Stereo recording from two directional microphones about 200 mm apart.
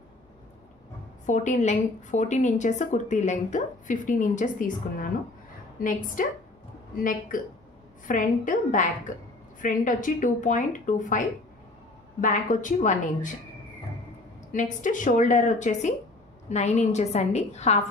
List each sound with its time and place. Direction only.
1.2 s a woman's voice: 40° left (ahead or behind)
5.9 s a woman's voice: 40° left (ahead or behind)
14.5 s a woman's voice: 40° left (ahead or behind)